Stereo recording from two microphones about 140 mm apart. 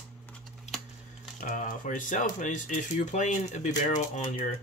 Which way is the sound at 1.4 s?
65° left (ahead or behind).